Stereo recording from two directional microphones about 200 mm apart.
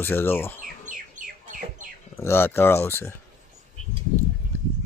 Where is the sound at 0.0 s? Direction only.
10° left (ahead or behind).